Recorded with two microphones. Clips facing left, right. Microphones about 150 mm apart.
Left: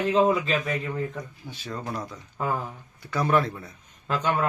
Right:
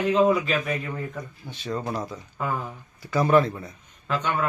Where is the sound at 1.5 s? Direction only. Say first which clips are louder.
Right 6 dB; centre (ahead or behind).